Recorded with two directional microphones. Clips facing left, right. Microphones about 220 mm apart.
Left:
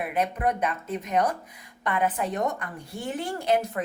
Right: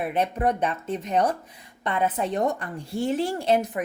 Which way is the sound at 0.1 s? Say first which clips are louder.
Right 1 dB; 30° right (ahead or behind).